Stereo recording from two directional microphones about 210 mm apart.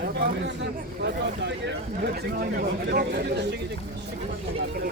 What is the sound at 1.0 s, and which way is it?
Speech, 55° right (ahead or behind).